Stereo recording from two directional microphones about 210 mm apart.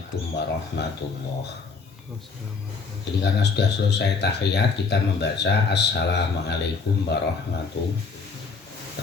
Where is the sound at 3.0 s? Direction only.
55° left (ahead or behind).